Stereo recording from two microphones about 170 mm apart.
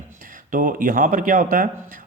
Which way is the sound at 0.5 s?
55° right (ahead or behind).